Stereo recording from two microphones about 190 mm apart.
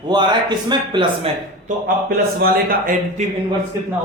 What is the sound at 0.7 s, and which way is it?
Speech, 25° right (ahead or behind).